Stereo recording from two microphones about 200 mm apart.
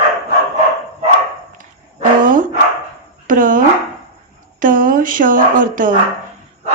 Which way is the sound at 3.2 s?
40° right (ahead or behind).